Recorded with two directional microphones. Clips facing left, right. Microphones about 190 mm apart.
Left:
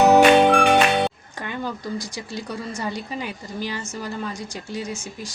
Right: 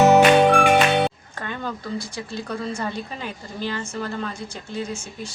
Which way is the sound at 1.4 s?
15° left (ahead or behind).